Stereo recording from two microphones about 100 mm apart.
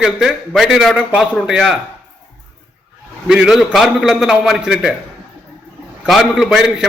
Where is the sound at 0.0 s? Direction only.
5° right (ahead or behind).